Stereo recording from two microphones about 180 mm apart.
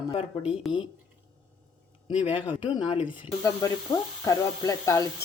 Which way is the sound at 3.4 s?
20° left (ahead or behind).